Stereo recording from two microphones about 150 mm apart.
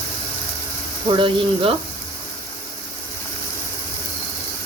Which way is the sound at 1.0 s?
35° right (ahead or behind).